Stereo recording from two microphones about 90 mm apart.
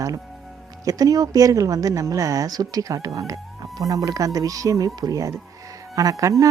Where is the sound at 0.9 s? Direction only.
45° right (ahead or behind).